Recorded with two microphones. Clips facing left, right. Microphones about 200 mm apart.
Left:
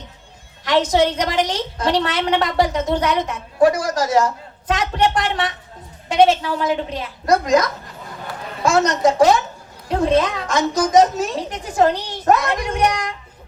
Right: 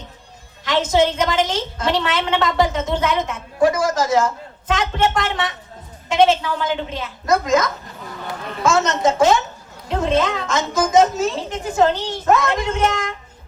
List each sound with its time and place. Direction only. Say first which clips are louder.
0.6 s a woman's voice: left 1 dB; 25° right (ahead or behind)